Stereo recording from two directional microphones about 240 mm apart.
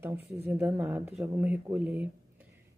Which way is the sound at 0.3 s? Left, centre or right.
Centre.